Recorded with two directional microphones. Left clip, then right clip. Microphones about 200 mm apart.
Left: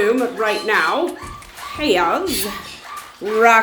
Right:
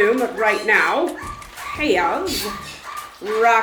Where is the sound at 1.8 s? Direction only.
35° left (ahead or behind).